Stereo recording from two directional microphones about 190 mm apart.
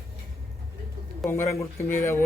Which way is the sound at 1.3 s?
15° left (ahead or behind).